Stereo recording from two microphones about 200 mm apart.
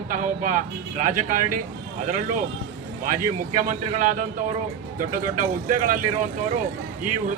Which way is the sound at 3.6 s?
40° right (ahead or behind).